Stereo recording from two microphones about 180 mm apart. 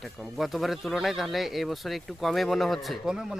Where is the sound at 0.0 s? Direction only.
Centre (ahead or behind).